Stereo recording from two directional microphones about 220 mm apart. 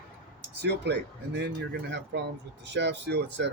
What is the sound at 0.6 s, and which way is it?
Speech, 50° right (ahead or behind).